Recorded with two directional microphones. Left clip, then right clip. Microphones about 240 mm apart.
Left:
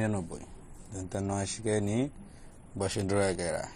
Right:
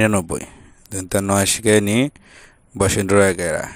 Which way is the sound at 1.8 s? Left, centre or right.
Right.